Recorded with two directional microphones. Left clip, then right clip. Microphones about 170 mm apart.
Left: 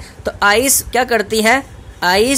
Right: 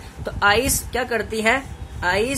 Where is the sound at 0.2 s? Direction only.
35° left (ahead or behind).